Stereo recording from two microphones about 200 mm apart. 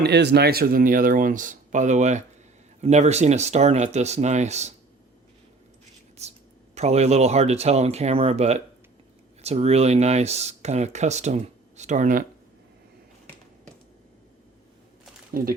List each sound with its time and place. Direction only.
0.0 s speech: 55° right (ahead or behind); by 4.7 s 35° right (ahead or behind)
6.2 s speech: 30° right (ahead or behind)
15.3 s speech: 45° right (ahead or behind)